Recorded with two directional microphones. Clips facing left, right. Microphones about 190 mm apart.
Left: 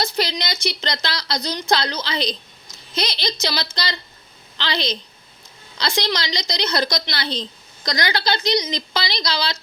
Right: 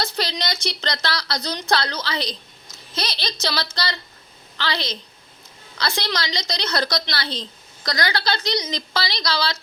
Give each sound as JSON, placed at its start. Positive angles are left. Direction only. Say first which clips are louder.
{"t": 0.0, "sound": "a woman's voice", "louder": "left 2 dB", "side_deg": 10}